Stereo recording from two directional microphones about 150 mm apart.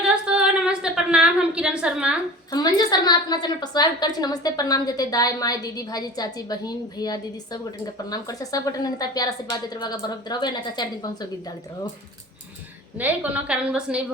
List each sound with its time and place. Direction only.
0.0 s a sound: 5° right (ahead or behind)
2.5 s a woman's voice: 25° left (ahead or behind)
13.0 s a woman's voice: 10° right (ahead or behind)